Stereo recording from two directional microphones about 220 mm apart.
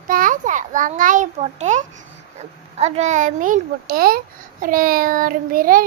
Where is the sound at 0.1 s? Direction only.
40° right (ahead or behind).